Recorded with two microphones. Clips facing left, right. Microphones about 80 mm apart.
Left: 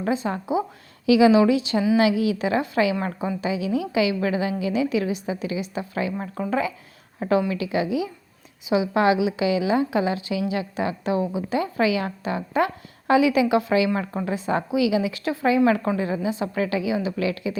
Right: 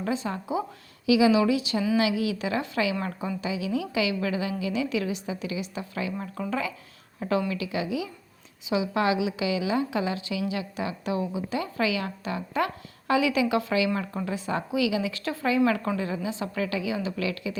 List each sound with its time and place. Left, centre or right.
0.0 s a woman's voice: left
1.0 s a woman's voice: left